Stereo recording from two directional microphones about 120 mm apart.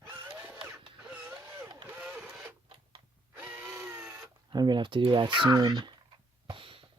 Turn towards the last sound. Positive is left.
turn(degrees=-45)  # may be behind; listen again after turning